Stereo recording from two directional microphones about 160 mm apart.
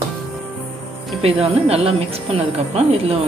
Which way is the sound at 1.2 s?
40° right (ahead or behind).